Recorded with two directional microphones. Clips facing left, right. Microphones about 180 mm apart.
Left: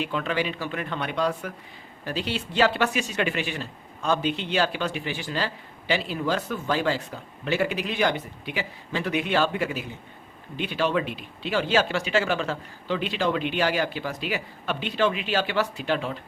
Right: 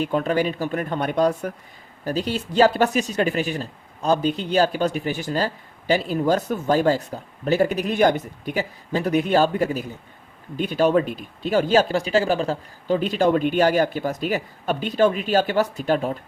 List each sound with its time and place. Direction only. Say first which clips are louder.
0.0 s a man's voice: right 6 dB; 45° right (ahead or behind)